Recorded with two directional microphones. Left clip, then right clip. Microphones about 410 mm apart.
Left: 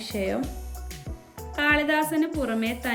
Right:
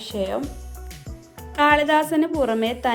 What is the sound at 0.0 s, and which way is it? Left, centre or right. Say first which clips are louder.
Speech: right 2 dB; centre.